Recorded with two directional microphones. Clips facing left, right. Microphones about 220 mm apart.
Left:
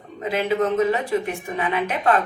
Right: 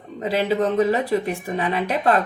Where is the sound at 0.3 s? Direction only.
35° right (ahead or behind).